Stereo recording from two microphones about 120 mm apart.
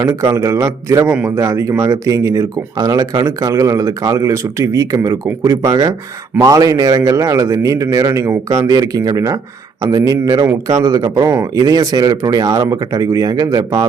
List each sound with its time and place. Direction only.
0.0 s speech: 25° right (ahead or behind)
11.3 s speech: 20° right (ahead or behind)
11.7 s speech: 30° right (ahead or behind)